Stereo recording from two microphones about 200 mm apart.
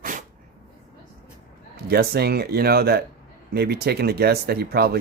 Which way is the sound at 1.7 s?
50° right (ahead or behind).